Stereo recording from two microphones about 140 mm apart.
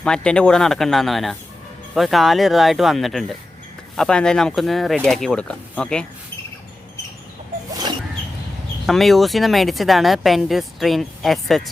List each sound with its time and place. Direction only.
0.0 s speech: 5° left (ahead or behind)
8.9 s speech: centre (ahead or behind)